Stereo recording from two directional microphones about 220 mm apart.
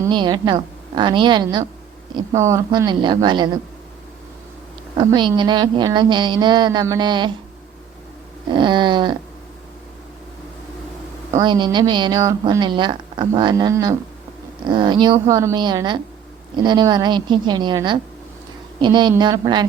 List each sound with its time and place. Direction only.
0.0 s a woman's voice: 20° right (ahead or behind)
4.9 s a woman's voice: 20° right (ahead or behind)
8.4 s a woman's voice: 20° right (ahead or behind)
11.3 s a woman's voice: 20° right (ahead or behind)